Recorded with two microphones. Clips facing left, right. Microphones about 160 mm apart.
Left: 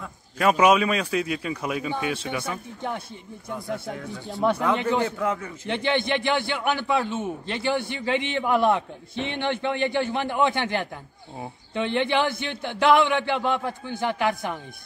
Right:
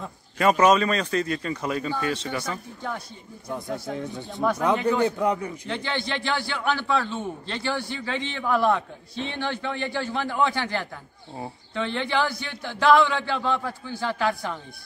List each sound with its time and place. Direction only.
0.4 s a man's voice: 5° left (ahead or behind)
3.9 s speech: 20° right (ahead or behind)
4.7 s a man's voice: 20° left (ahead or behind)
5.0 s a man's voice: 20° right (ahead or behind)
5.7 s a man's voice: 20° left (ahead or behind)